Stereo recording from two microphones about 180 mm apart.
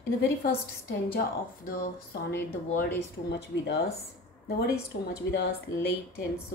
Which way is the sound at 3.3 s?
70° left (ahead or behind).